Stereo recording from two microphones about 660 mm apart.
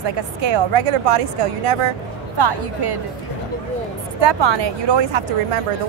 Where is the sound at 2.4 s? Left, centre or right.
Right.